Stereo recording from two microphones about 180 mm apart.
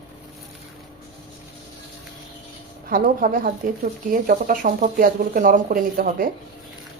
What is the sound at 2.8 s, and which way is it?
Speech, 50° right (ahead or behind).